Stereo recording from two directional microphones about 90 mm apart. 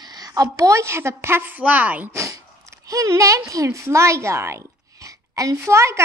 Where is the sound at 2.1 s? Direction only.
35° right (ahead or behind).